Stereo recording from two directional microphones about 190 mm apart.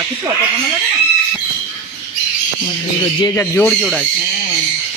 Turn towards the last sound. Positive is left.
turn(degrees=0)  # may be behind; listen again after turning